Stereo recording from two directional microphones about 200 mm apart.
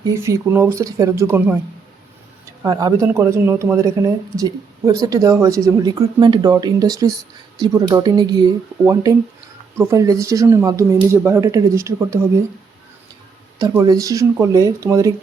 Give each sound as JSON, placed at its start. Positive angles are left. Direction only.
{"t": 0.1, "sound": "speech", "side_deg": -15}
{"t": 2.6, "sound": "speech", "side_deg": -15}
{"t": 13.6, "sound": "speech", "side_deg": -20}